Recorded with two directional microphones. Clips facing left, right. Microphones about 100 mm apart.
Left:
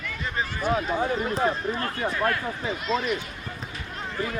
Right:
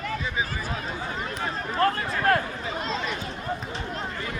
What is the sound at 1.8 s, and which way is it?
Speech, 45° right (ahead or behind).